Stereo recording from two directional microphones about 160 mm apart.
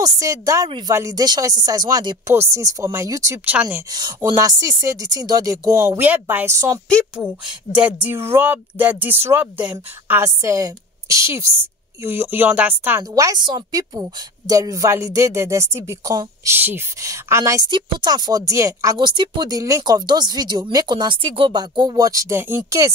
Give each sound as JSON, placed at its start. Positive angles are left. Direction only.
{"t": 0.0, "sound": "a woman's voice", "side_deg": -20}
{"t": 7.8, "sound": "a woman's voice", "side_deg": -10}